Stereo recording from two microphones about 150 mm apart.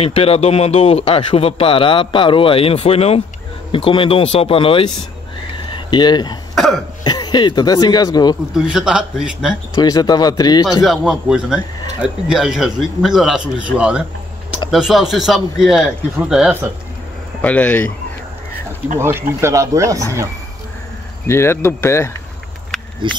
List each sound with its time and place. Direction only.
0.0 s speech: 40° left (ahead or behind)
6.5 s cough: centre (ahead or behind)
7.1 s speech: 30° left (ahead or behind)
8.5 s speech: 5° right (ahead or behind)
9.8 s speech: 25° left (ahead or behind)
10.8 s speech: 5° right (ahead or behind)
17.4 s speech: 10° left (ahead or behind)
18.9 s speech: 15° right (ahead or behind)
21.3 s speech: 15° left (ahead or behind)
23.0 s speech: 35° right (ahead or behind)